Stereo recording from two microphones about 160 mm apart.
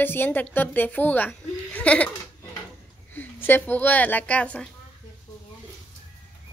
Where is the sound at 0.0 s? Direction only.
10° left (ahead or behind).